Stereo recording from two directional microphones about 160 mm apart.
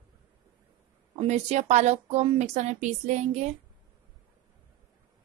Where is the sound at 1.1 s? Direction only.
45° right (ahead or behind).